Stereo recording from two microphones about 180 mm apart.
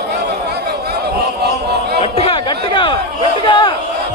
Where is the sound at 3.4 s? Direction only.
25° left (ahead or behind).